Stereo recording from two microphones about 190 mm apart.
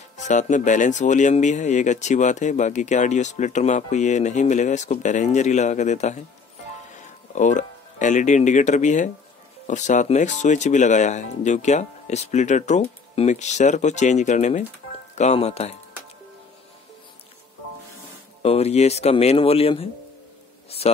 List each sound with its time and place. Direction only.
0.2 s speech: 40° left (ahead or behind)
7.3 s speech: 40° left (ahead or behind)
18.4 s speech: 30° left (ahead or behind)